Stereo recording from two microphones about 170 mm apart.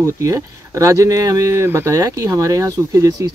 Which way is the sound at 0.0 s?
20° right (ahead or behind).